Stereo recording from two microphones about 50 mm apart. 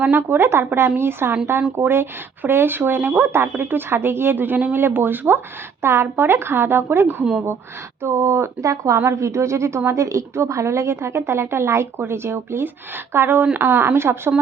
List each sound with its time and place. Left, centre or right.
0.1 s speech: right
1.8 s speech: right
2.4 s speech: right
5.8 s speech: right
8.0 s speech: right
9.0 s speech: right